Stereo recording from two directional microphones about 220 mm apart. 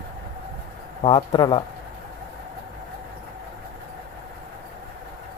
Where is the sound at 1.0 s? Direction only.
20° left (ahead or behind).